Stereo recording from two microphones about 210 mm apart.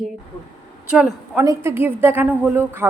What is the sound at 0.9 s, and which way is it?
A woman's voice, 5° right (ahead or behind).